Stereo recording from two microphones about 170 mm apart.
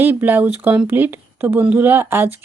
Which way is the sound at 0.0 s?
10° right (ahead or behind).